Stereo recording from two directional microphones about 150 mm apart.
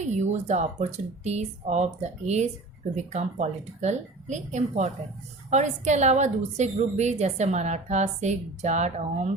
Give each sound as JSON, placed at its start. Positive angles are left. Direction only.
{"t": 0.1, "sound": "a woman's voice", "side_deg": -50}